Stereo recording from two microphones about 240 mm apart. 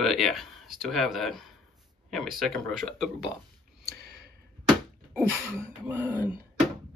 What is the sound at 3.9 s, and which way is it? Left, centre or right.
Sigh, right.